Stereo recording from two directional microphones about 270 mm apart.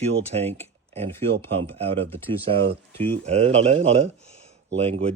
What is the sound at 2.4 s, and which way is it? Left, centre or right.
Speech, right.